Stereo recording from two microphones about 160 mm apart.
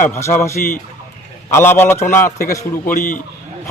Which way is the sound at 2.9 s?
55° left (ahead or behind).